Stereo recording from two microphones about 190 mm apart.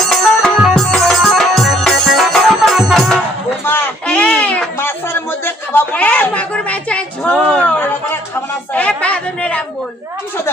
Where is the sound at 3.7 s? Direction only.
5° left (ahead or behind).